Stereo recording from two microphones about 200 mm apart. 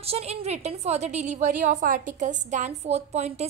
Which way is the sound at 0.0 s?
30° right (ahead or behind).